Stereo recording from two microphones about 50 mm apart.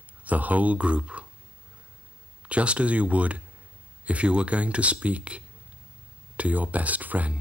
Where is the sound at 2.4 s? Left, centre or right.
Right.